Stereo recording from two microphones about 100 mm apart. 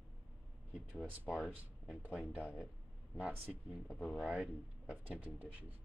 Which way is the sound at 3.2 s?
10° right (ahead or behind).